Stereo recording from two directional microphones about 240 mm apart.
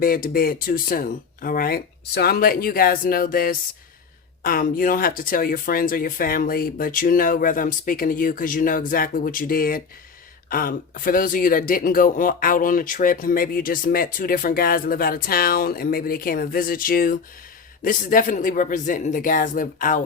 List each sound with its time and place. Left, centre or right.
0.0 s speech: left